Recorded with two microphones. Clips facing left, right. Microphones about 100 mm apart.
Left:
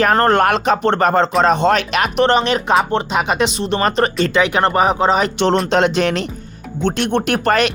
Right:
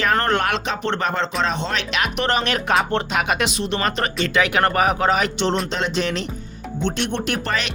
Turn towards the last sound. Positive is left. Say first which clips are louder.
# left 8 dB
turn(degrees=55)  # may be behind; listen again after turning